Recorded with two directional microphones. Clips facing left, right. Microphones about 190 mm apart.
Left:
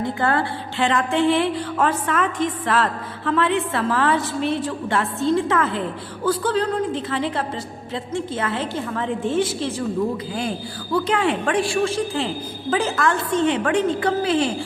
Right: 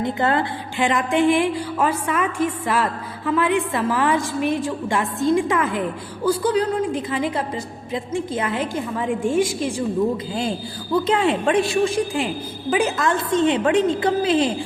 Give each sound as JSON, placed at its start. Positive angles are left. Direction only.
{"t": 0.0, "sound": "a woman's voice", "side_deg": -20}
{"t": 10.9, "sound": "a woman's voice", "side_deg": -25}